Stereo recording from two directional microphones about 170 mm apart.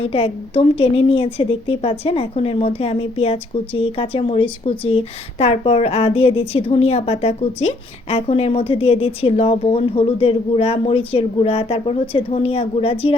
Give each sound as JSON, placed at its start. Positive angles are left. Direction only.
{"t": 0.0, "sound": "a woman's voice", "side_deg": 35}